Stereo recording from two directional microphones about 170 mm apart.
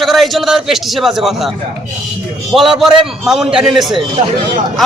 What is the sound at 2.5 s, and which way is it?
A man's voice, centre (ahead or behind).